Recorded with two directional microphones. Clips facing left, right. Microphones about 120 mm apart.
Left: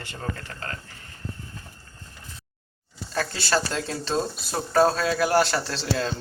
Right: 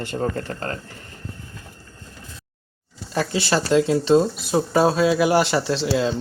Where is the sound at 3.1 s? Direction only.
15° right (ahead or behind).